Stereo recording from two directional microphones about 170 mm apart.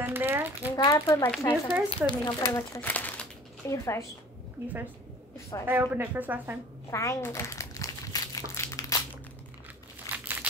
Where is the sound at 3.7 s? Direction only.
20° left (ahead or behind).